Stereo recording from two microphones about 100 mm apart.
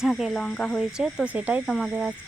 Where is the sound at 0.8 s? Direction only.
10° right (ahead or behind).